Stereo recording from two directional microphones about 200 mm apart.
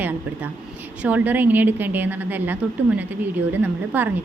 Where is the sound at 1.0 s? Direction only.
10° right (ahead or behind).